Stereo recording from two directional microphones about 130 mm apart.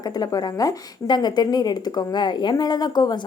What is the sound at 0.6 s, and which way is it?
A woman's voice, 35° left (ahead or behind).